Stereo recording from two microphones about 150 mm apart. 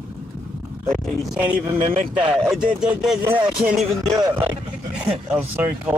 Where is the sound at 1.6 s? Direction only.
40° right (ahead or behind).